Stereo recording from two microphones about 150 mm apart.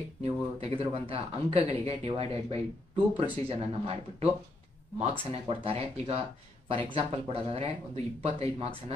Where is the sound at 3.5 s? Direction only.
40° right (ahead or behind).